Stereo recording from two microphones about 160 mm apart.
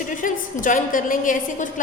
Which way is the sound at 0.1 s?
55° left (ahead or behind).